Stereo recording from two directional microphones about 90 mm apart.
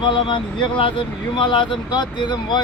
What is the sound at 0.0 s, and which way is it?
Speech, 65° left (ahead or behind).